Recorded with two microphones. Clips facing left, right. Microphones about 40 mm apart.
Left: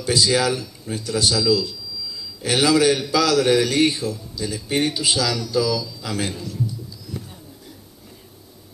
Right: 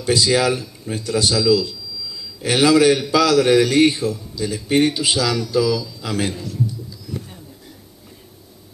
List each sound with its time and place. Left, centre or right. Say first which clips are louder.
0.0 s a man's voice: right 2 dB; right
6.3 s a man's voice: right 2 dB; centre